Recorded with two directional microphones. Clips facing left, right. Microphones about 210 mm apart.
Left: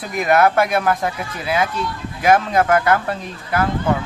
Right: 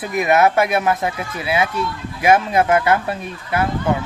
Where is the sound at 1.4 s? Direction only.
10° right (ahead or behind).